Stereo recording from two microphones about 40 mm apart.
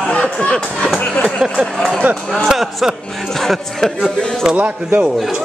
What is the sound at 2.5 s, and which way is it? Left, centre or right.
Speech, centre.